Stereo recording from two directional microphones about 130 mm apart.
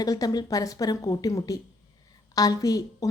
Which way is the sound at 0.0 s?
30° left (ahead or behind).